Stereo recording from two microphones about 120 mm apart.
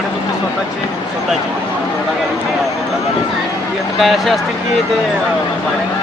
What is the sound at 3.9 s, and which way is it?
Speech, centre (ahead or behind).